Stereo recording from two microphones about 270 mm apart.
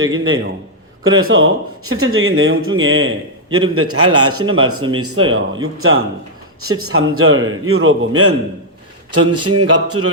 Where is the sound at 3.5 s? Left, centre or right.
Right.